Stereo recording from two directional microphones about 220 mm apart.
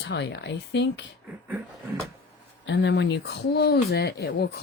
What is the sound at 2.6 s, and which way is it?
Speech, 50° left (ahead or behind).